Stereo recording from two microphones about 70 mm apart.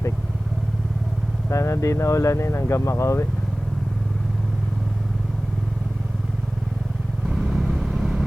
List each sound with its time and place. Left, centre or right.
1.5 s speech: left
7.3 s vehicle: centre